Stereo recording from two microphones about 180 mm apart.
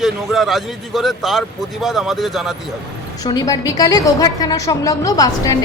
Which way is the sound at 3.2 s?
20° left (ahead or behind).